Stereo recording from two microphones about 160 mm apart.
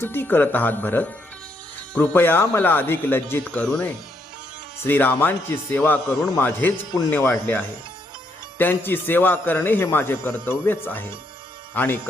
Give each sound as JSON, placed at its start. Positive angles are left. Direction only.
{"t": 0.0, "sound": "a man's voice", "side_deg": 15}